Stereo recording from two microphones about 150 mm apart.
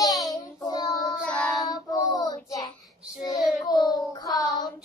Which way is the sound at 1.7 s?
25° left (ahead or behind).